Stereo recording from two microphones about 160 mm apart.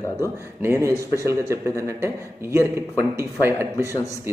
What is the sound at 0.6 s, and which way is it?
A man's voice, 15° right (ahead or behind).